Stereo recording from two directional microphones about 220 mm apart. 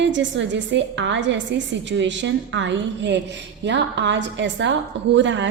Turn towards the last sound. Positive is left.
turn(degrees=-55)  # may be behind; listen again after turning